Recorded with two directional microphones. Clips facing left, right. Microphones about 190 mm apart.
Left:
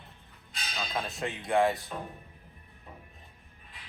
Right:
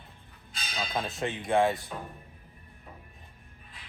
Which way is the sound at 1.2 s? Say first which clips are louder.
Right 3 dB; 25° right (ahead or behind).